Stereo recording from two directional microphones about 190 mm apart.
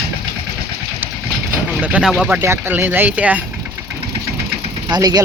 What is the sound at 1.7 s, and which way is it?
Speech, 5° right (ahead or behind).